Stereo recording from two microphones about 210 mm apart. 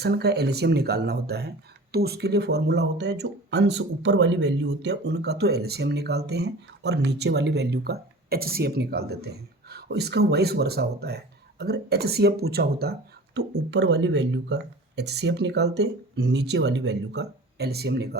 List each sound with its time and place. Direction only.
0.0 s speech: 50° right (ahead or behind)